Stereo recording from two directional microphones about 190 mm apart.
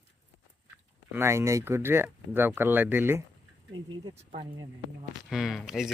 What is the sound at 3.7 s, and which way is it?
Speech, 25° right (ahead or behind).